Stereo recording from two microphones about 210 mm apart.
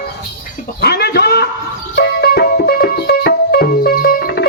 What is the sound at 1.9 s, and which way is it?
Music, 55° left (ahead or behind).